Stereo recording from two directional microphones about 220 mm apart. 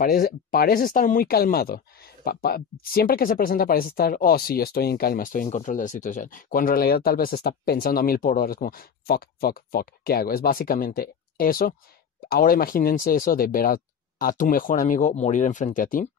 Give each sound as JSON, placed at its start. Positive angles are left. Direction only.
{"t": 0.0, "sound": "speech", "side_deg": 40}